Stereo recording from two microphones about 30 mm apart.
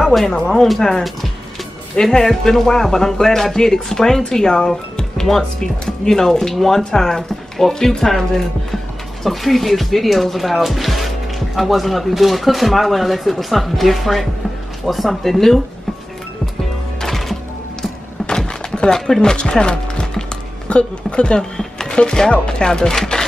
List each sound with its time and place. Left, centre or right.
0.0 s speech: centre; by 4.6 s left
6.0 s speech: centre
17.0 s music: centre
18.9 s speech: centre
19.3 s speech: left
21.5 s a sound: centre
21.9 s speech: left
23.1 s a sound: left